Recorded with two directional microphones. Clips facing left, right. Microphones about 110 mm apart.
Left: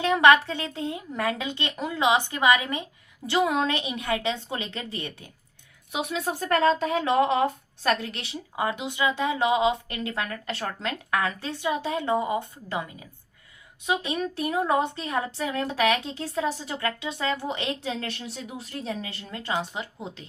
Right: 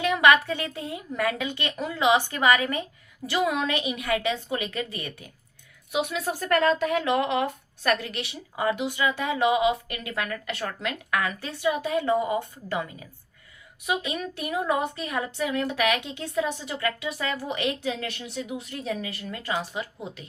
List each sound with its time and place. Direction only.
0.0 s a woman's voice: 30° left (ahead or behind)